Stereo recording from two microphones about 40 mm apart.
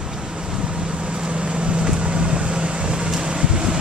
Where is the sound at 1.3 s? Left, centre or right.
Right.